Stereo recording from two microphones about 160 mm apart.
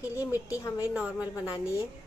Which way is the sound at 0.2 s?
10° right (ahead or behind).